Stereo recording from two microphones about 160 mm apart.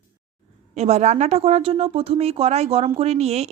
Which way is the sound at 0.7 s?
45° right (ahead or behind).